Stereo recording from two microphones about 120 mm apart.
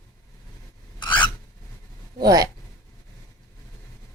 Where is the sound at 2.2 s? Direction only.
30° right (ahead or behind).